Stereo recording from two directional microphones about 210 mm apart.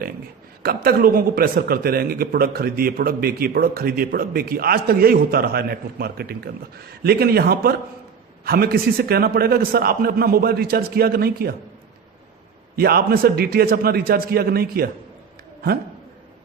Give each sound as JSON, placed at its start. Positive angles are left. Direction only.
{"t": 0.6, "sound": "speech", "side_deg": -45}
{"t": 12.7, "sound": "speech", "side_deg": -45}